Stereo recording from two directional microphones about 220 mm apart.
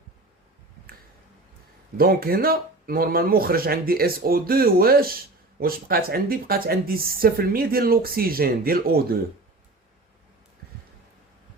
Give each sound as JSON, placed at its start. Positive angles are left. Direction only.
{"t": 2.0, "sound": "speech", "side_deg": -40}